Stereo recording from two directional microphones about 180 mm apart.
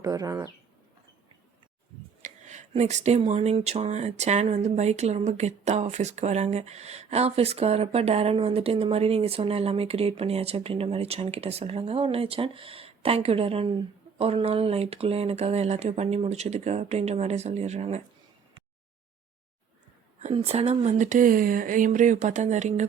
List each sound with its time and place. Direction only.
0.0 s speech: 20° right (ahead or behind)
2.2 s speech: 40° right (ahead or behind)
20.2 s speech: 35° right (ahead or behind)